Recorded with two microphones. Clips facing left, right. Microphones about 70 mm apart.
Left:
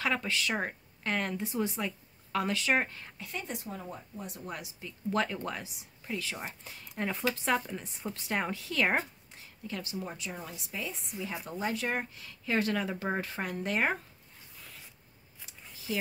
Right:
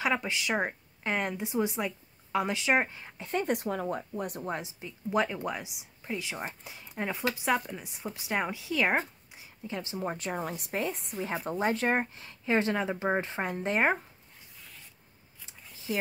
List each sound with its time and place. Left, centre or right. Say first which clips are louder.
0.0 s speech: right 2 dB; centre
3.2 s a woman's voice: right 9 dB; right
3.4 s speech: right 10 dB; right
4.4 s a woman's voice: right 6 dB; right; by 8.9 s centre
9.7 s a woman's voice: right 4 dB; right